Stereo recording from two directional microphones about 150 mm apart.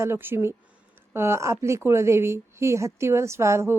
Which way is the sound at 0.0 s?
15° right (ahead or behind).